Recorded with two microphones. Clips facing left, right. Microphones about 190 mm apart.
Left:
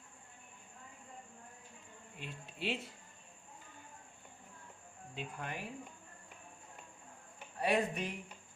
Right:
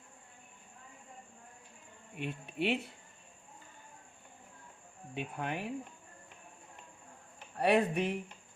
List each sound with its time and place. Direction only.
2.1 s speech: 60° right (ahead or behind)
5.1 s speech: 65° right (ahead or behind)
7.6 s speech: 65° right (ahead or behind)